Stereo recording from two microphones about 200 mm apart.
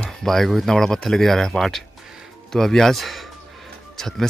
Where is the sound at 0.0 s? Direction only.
Centre (ahead or behind).